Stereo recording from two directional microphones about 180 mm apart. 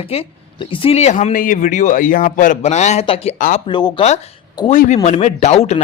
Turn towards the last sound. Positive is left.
turn(degrees=35)  # may be behind; listen again after turning